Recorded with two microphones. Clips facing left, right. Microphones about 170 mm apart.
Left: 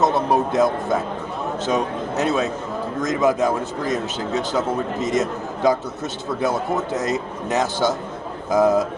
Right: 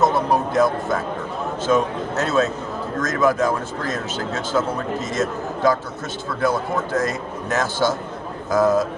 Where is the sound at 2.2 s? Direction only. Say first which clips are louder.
Right 1 dB; 15° left (ahead or behind).